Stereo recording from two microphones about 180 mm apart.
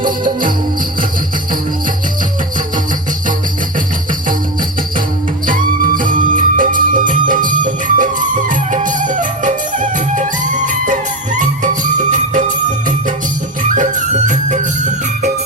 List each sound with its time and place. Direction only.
5.5 s music: 50° right (ahead or behind)
13.6 s music: 45° right (ahead or behind)